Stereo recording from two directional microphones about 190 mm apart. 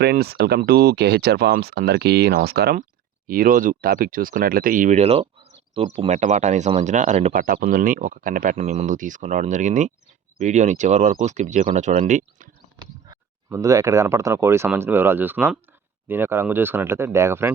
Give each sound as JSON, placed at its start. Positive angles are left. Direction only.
{"t": 0.0, "sound": "speech", "side_deg": -55}
{"t": 13.1, "sound": "speech", "side_deg": -15}